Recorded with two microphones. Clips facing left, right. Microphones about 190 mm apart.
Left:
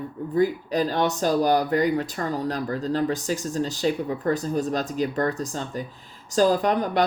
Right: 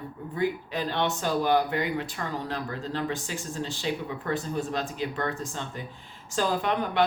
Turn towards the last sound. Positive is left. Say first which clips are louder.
# left 3 dB
turn(degrees=40)  # may be behind; listen again after turning